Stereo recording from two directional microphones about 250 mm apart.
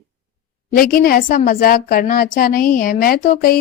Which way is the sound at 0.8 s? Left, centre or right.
Left.